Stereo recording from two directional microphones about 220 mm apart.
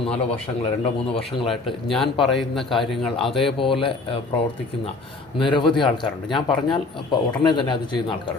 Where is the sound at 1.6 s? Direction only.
Centre (ahead or behind).